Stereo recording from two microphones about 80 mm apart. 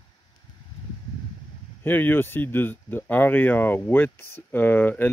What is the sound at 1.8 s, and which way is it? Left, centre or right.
Speech, left.